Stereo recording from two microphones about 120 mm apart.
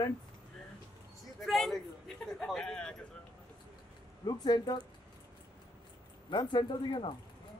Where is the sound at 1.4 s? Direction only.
Centre (ahead or behind).